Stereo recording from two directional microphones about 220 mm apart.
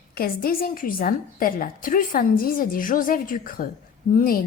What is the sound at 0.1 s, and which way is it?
A woman's voice, 45° left (ahead or behind).